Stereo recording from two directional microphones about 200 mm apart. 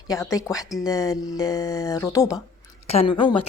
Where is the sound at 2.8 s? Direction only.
30° left (ahead or behind).